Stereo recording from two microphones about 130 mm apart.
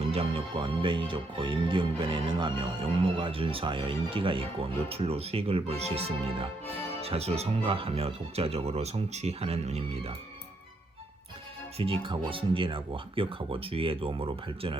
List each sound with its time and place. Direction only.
0.1 s music: 45° right (ahead or behind)
11.8 s music: 45° right (ahead or behind)